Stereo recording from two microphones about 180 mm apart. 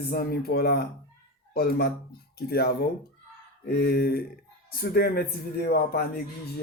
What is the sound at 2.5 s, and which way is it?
Speech, 60° left (ahead or behind).